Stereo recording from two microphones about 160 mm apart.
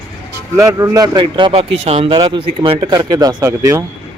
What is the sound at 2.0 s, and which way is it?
Speech, 25° right (ahead or behind).